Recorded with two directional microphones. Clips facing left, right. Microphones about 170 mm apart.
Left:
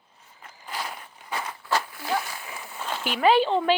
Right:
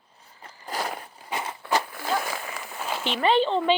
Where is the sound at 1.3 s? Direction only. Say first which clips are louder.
Right 1 dB; 20° right (ahead or behind).